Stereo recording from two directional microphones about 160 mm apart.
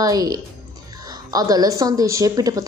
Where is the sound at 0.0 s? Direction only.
25° right (ahead or behind).